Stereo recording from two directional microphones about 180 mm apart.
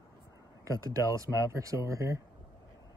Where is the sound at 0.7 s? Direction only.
20° right (ahead or behind).